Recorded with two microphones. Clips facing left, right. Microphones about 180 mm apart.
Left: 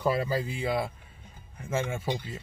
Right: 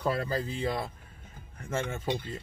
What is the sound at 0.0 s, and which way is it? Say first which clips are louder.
Speech: left 3 dB; 10° left (ahead or behind).